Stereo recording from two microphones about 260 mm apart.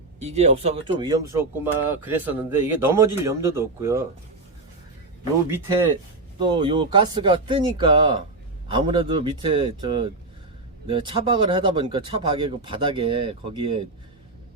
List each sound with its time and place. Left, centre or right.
0.2 s speech: right
5.5 s speech: centre